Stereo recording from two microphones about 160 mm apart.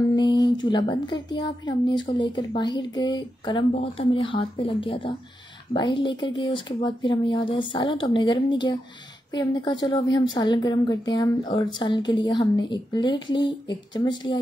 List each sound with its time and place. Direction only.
0.1 s a woman's voice: 25° left (ahead or behind)
3.7 s a woman's voice: 35° left (ahead or behind)